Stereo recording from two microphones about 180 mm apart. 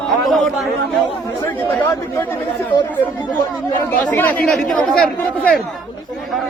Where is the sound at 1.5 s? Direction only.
10° left (ahead or behind).